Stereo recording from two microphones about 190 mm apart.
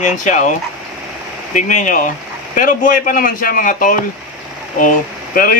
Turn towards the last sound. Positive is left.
turn(degrees=50)  # may be behind; listen again after turning